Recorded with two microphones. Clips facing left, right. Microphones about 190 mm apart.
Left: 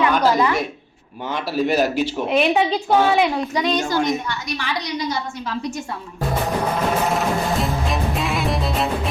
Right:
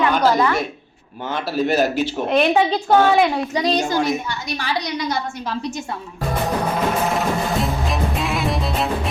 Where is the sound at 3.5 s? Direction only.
35° right (ahead or behind).